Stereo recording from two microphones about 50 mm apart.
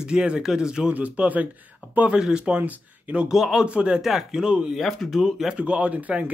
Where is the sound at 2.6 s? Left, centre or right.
Right.